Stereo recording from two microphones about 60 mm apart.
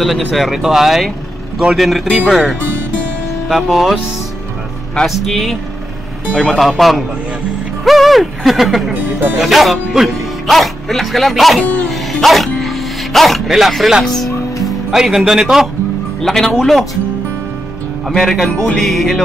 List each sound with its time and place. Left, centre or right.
0.0 s speech: centre
3.4 s speech: centre
5.0 s a man's voice: centre
6.8 s speech: centre
11.9 s dog: centre
14.9 s speech: centre
16.2 s a man's voice: centre
18.0 s speech: centre
18.5 s music: left
18.8 s speech: centre